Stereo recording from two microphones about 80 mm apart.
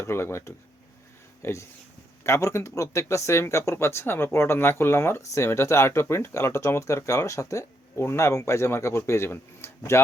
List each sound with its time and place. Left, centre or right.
0.0 s speech: left